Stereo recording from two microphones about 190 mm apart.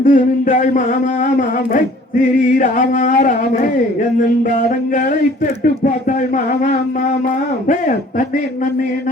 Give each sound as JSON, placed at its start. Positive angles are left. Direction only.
{"t": 0.0, "sound": "speech", "side_deg": 40}
{"t": 5.8, "sound": "speech", "side_deg": 40}